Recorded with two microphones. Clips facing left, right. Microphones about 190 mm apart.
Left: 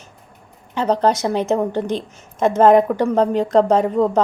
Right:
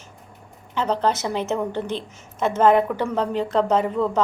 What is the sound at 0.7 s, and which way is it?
A woman's voice, 15° left (ahead or behind).